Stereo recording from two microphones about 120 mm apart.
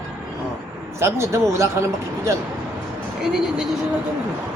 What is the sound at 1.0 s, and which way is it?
Speech, 20° right (ahead or behind).